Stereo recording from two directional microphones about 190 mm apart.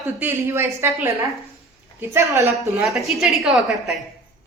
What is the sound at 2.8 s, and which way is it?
A woman's voice, centre (ahead or behind).